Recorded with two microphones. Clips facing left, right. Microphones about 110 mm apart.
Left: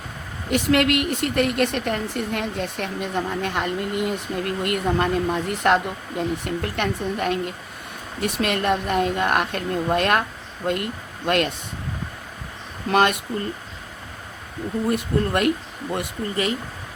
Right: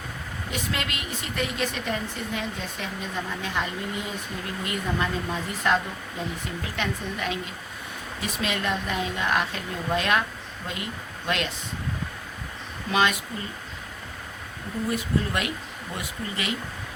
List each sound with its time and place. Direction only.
0.5 s a woman's voice: 65° left (ahead or behind)
12.9 s a woman's voice: 55° left (ahead or behind)
14.8 s a woman's voice: 55° left (ahead or behind)